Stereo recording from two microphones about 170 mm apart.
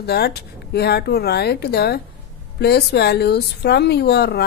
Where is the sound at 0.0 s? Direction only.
70° left (ahead or behind).